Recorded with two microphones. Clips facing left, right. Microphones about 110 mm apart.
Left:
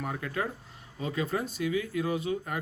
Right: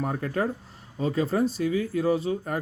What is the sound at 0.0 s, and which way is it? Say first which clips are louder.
Speech: right 6 dB; 40° right (ahead or behind).